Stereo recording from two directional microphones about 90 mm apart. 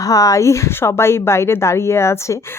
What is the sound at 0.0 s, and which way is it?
A woman's voice, 40° left (ahead or behind).